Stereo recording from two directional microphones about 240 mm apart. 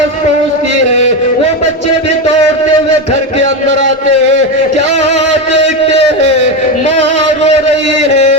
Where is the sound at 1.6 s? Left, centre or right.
Right.